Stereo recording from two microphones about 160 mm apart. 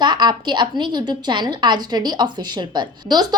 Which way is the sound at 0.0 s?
25° right (ahead or behind).